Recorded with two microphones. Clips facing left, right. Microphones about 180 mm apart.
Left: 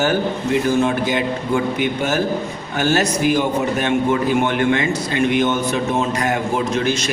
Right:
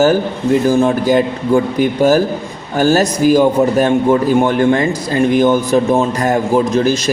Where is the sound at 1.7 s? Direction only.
40° right (ahead or behind).